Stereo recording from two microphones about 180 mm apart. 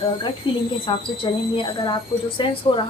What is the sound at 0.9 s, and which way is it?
Speech, 30° left (ahead or behind).